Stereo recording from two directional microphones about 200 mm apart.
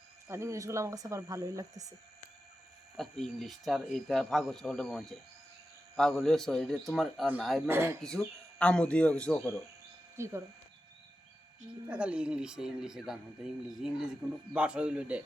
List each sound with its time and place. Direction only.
0.3 s speech: 15° right (ahead or behind)
3.0 s speech: centre (ahead or behind)
7.7 s speech: 10° right (ahead or behind)
8.0 s speech: 5° left (ahead or behind)
10.2 s speech: 15° right (ahead or behind)
11.9 s speech: 5° right (ahead or behind)